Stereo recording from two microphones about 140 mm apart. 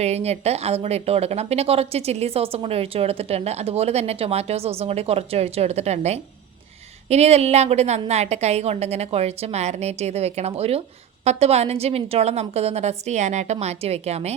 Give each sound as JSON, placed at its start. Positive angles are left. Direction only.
{"t": 0.0, "sound": "a woman's voice", "side_deg": -50}